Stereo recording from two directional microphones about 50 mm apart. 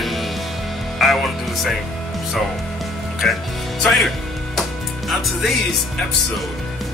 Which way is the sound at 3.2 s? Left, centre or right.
Centre.